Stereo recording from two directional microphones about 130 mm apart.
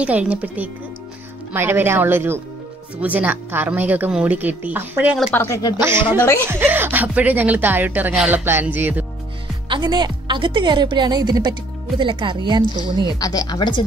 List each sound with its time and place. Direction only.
0.0 s speech: 10° right (ahead or behind)
5.3 s speech: 15° left (ahead or behind)
5.8 s a woman's voice: 20° right (ahead or behind)
9.7 s speech: 35° right (ahead or behind)
13.2 s speech: 30° left (ahead or behind)